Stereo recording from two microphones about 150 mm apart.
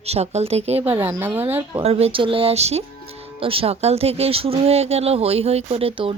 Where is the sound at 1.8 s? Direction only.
40° right (ahead or behind).